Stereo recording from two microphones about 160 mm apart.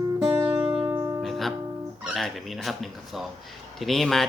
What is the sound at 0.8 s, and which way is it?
Music, 25° right (ahead or behind).